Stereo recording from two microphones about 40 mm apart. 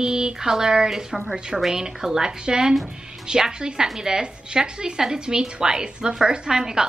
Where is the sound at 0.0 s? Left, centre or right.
Centre.